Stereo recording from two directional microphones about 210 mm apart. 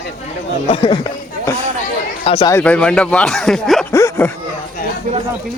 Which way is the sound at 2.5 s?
5° left (ahead or behind).